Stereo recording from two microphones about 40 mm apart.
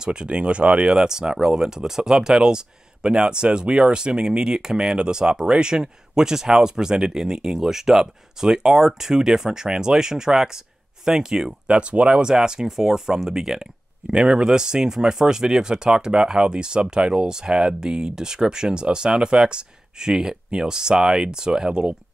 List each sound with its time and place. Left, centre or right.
0.0 s speech: right
11.6 s speech: right